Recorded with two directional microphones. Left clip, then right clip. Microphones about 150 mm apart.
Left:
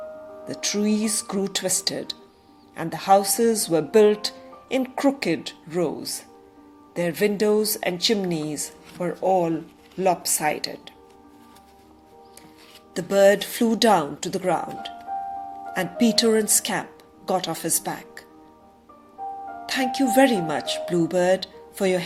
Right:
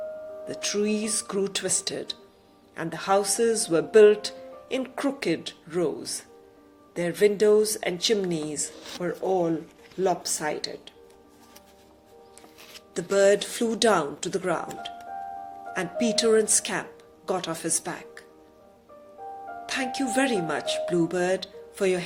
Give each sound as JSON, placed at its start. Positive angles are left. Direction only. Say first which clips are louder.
{"t": 0.4, "sound": "speech", "louder": "left 2 dB", "side_deg": 45}
{"t": 12.9, "sound": "speech", "louder": "left 3 dB", "side_deg": 45}
{"t": 19.6, "sound": "speech", "louder": "left 5 dB", "side_deg": 50}